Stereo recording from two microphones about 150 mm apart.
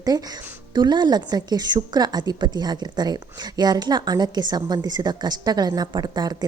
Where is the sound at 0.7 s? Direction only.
30° right (ahead or behind).